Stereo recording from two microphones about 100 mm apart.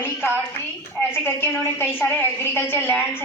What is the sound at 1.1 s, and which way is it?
A woman's voice, 20° left (ahead or behind).